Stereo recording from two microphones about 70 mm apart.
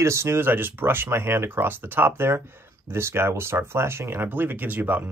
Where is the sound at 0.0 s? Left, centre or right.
Right.